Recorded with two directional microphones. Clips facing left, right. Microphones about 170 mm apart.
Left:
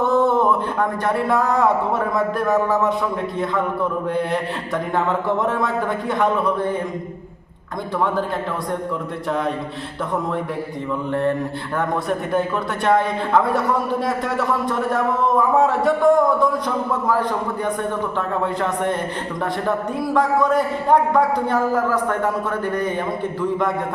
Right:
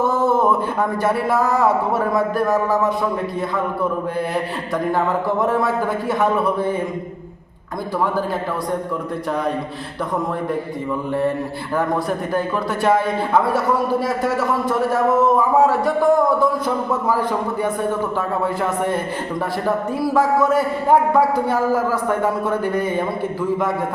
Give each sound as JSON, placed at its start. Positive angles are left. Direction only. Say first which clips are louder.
{"t": 0.1, "sound": "a sound", "louder": "left 1 dB", "side_deg": -5}
{"t": 0.8, "sound": "speech", "louder": "right 1 dB", "side_deg": -5}
{"t": 4.9, "sound": "speech", "louder": "left 1 dB", "side_deg": 0}
{"t": 11.1, "sound": "a man's voice", "louder": "left 1 dB", "side_deg": -5}
{"t": 20.1, "sound": "a man's voice", "louder": "right 1 dB", "side_deg": -5}